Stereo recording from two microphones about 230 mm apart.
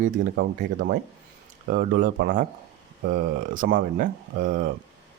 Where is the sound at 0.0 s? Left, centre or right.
Right.